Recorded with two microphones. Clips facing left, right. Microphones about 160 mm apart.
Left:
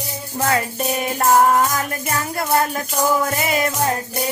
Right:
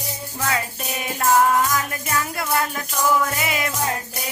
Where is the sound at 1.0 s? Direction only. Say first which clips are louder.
Left 2 dB; 40° left (ahead or behind).